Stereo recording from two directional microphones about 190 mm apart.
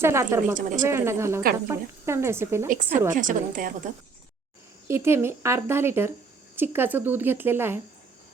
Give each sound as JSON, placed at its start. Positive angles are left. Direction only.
{"t": 0.0, "sound": "speech", "side_deg": -15}
{"t": 3.2, "sound": "a woman's voice", "side_deg": -45}
{"t": 4.9, "sound": "speech", "side_deg": -15}